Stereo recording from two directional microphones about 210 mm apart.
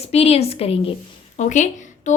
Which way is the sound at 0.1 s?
30° left (ahead or behind).